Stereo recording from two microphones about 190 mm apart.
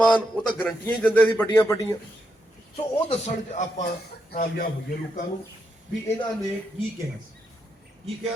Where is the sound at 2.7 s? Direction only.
35° left (ahead or behind).